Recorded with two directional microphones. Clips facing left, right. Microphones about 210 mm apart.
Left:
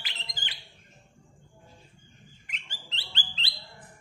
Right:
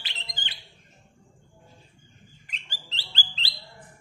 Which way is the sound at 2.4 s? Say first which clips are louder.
Right 1 dB; 35° right (ahead or behind).